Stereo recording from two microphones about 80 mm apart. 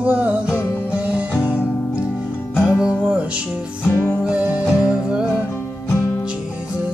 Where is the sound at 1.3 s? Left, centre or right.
Left.